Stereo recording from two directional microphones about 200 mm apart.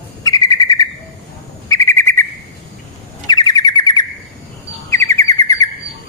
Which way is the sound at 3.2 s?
20° left (ahead or behind).